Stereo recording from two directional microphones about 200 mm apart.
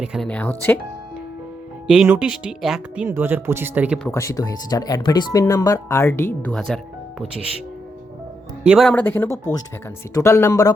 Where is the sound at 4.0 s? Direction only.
15° left (ahead or behind).